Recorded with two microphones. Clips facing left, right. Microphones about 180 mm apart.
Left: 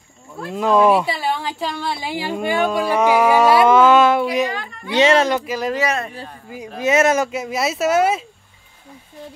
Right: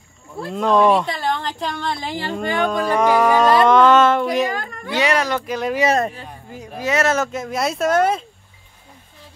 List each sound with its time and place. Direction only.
0.5 s speech: 5° left (ahead or behind)
4.5 s a sound: 45° right (ahead or behind)
4.9 s speech: 25° left (ahead or behind)
5.5 s speech: centre (ahead or behind)
5.9 s speech: 40° right (ahead or behind)
6.8 s speech: 20° left (ahead or behind)